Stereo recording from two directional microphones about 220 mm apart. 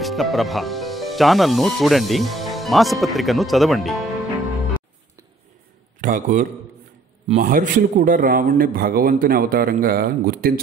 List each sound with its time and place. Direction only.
0.0 s speech: centre (ahead or behind)
5.9 s a man's voice: 35° right (ahead or behind)